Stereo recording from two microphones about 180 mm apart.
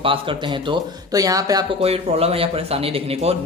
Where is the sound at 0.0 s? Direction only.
30° right (ahead or behind).